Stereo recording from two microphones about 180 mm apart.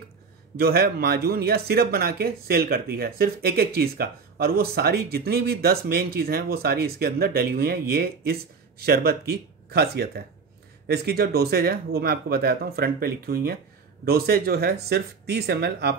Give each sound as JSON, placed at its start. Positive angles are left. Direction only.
{"t": 0.6, "sound": "speech", "side_deg": -60}